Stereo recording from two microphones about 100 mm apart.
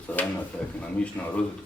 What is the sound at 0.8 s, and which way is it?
Speech, 15° left (ahead or behind).